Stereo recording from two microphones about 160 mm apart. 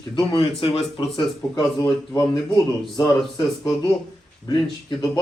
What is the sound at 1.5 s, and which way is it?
Speech, 25° left (ahead or behind).